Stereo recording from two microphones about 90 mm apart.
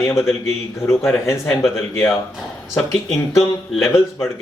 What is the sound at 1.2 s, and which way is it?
Speech, 30° left (ahead or behind).